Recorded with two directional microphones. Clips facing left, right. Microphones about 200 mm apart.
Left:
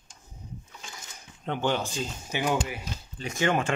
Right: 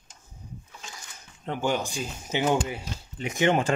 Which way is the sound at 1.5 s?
10° right (ahead or behind).